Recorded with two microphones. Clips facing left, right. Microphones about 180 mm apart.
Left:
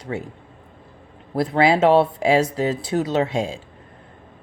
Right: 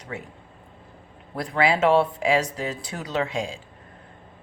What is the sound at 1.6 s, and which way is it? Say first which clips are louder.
Speech: left 4 dB; 40° left (ahead or behind).